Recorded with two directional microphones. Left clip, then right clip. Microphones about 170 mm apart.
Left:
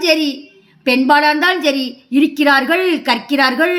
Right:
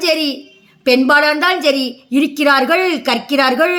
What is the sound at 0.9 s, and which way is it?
A woman's voice, 40° right (ahead or behind).